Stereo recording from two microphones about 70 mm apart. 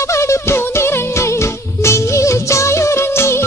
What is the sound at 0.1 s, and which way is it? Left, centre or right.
Music, left.